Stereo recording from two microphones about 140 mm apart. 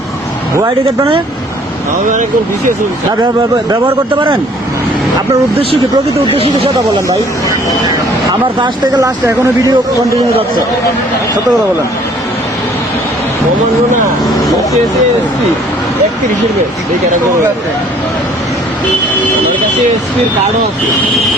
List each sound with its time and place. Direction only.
0.5 s speech: 20° right (ahead or behind)
8.6 s speech: 25° right (ahead or behind)